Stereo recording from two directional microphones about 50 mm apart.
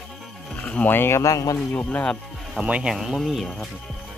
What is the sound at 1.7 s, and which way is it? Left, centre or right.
Speech, left.